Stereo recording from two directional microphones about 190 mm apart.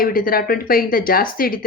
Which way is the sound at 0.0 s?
50° left (ahead or behind).